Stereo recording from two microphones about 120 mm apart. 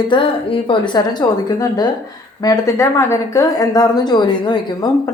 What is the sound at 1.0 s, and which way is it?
Speech, 25° left (ahead or behind).